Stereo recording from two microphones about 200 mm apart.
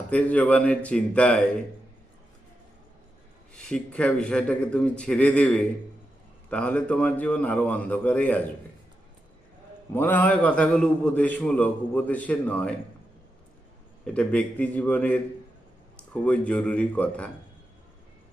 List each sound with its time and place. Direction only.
0.1 s a man's voice: 5° left (ahead or behind)
3.5 s a man's voice: 5° left (ahead or behind)
9.9 s a man's voice: 10° left (ahead or behind)
14.0 s a man's voice: 5° left (ahead or behind)
16.2 s a man's voice: 5° left (ahead or behind)